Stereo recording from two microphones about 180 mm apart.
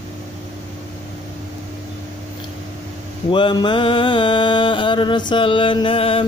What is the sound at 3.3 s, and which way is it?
Mantra, 25° left (ahead or behind).